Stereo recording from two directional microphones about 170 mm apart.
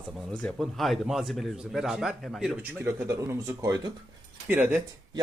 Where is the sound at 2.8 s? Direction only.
20° right (ahead or behind).